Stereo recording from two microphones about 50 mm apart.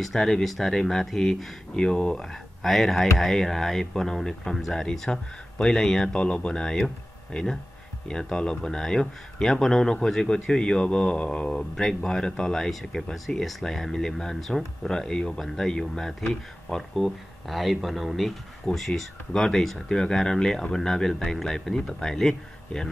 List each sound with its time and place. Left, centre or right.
0.0 s speech: centre
2.2 s speech: centre; by 11.6 s left
11.7 s speech: centre